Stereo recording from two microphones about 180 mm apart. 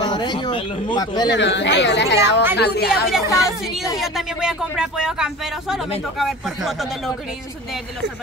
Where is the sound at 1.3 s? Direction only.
75° left (ahead or behind).